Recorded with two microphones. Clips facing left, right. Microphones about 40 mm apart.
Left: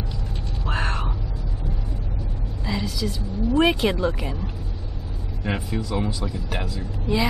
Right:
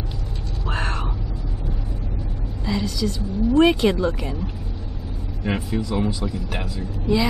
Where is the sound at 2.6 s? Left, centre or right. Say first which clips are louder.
Right 3 dB; centre.